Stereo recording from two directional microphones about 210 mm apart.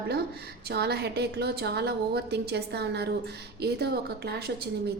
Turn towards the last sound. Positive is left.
turn(degrees=-50)  # may be behind; listen again after turning